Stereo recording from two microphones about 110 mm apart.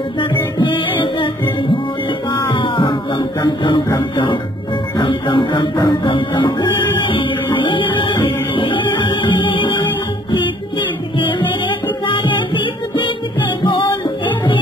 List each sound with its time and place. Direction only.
0.6 s music: 45° left (ahead or behind)
11.1 s music: 50° left (ahead or behind)